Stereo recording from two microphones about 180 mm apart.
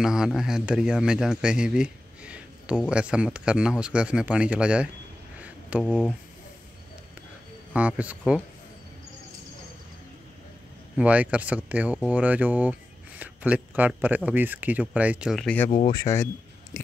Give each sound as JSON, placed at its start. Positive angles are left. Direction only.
{"t": 0.0, "sound": "speech", "side_deg": -5}
{"t": 5.4, "sound": "a sound", "side_deg": -5}
{"t": 7.7, "sound": "speech", "side_deg": -10}
{"t": 11.0, "sound": "speech", "side_deg": -5}
{"t": 15.9, "sound": "speech", "side_deg": 20}